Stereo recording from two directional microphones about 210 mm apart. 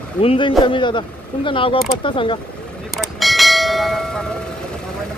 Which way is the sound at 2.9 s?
Centre (ahead or behind).